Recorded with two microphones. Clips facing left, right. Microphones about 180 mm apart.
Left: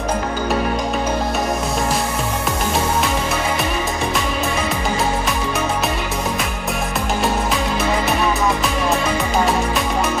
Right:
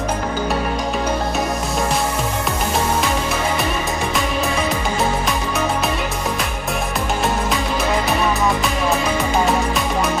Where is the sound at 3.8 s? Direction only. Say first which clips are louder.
Even; centre (ahead or behind).